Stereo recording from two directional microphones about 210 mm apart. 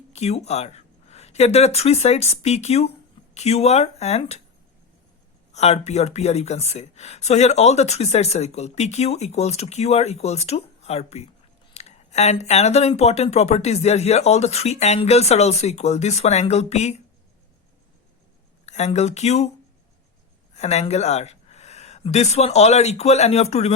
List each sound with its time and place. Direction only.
0.1 s speech: 30° left (ahead or behind)
5.5 s speech: 30° left (ahead or behind)
18.6 s speech: 30° left (ahead or behind)
20.6 s speech: 30° left (ahead or behind)